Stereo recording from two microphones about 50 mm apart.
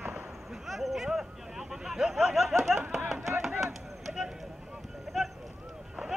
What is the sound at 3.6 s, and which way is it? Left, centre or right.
Chop, centre.